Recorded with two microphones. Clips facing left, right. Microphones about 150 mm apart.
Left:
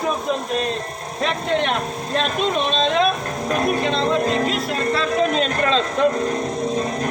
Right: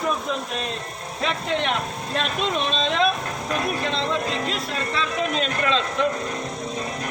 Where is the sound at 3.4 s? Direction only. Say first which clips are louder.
Left 6 dB; 40° left (ahead or behind).